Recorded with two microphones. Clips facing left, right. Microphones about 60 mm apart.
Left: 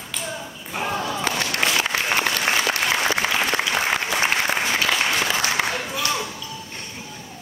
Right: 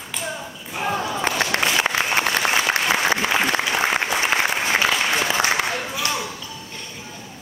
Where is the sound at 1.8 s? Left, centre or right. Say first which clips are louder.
Right 2 dB; right.